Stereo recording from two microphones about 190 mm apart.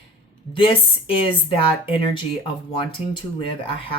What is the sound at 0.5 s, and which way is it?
Speech, 25° left (ahead or behind).